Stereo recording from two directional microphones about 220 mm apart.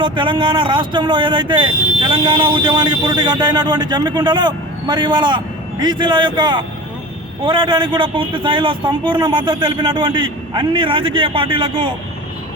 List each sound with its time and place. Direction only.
0.0 s speech: 20° right (ahead or behind)